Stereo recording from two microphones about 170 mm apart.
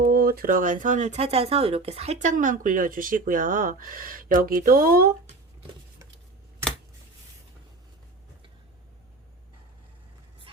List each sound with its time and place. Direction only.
0.0 s speech: 60° right (ahead or behind)